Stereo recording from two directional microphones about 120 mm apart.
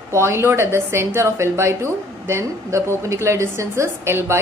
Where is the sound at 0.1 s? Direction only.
20° right (ahead or behind).